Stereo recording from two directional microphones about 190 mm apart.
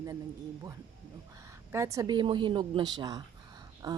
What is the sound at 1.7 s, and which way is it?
Speech, 15° right (ahead or behind).